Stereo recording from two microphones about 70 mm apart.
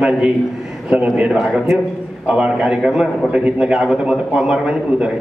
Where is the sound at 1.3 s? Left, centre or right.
Centre.